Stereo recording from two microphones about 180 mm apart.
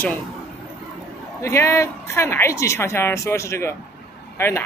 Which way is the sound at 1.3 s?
15° left (ahead or behind).